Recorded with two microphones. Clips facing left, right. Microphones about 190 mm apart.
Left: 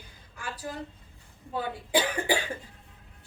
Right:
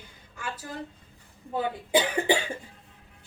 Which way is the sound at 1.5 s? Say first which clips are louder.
Right 3 dB; 20° right (ahead or behind).